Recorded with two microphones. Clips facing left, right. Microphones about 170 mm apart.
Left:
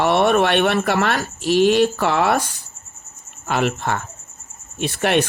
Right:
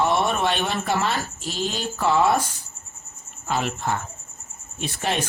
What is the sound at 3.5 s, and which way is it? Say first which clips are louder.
Speech: left 4 dB; 70° left (ahead or behind).